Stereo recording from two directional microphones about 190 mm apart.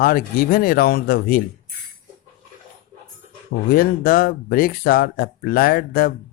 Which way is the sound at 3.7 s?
50° left (ahead or behind).